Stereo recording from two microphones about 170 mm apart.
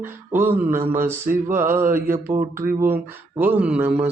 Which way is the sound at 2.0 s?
50° right (ahead or behind).